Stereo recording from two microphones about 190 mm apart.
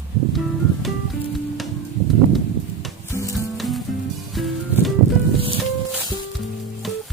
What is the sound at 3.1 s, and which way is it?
Music, 15° left (ahead or behind).